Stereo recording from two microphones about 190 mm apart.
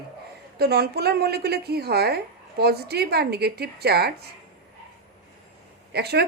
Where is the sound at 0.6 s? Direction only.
55° right (ahead or behind).